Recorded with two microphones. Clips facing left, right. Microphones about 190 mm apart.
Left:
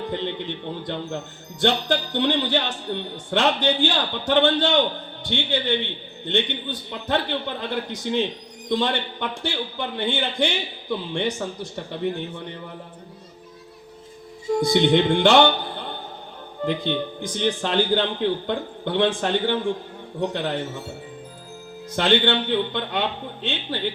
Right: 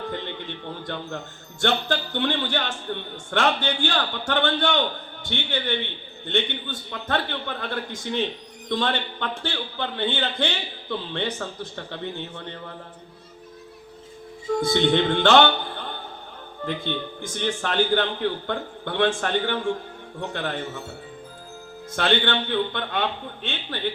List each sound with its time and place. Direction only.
0.0 s a man's voice: 20° left (ahead or behind)
14.6 s a man's voice: 15° left (ahead or behind)
21.9 s a man's voice: 15° left (ahead or behind)